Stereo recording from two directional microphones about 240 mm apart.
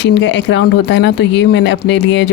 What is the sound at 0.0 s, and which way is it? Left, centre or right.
Speech, left.